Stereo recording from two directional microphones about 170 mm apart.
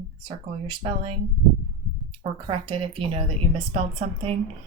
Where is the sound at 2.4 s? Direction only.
30° right (ahead or behind).